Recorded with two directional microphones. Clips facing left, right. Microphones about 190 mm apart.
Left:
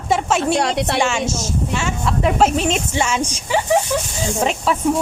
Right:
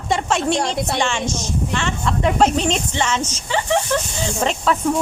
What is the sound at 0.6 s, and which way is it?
Speech, 70° left (ahead or behind).